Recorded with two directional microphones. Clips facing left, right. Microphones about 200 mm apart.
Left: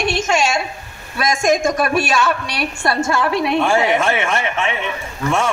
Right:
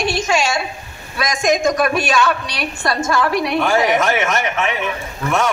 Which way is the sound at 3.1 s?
25° left (ahead or behind).